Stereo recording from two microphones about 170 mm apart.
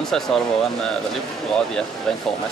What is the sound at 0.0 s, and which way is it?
Speech, 5° left (ahead or behind).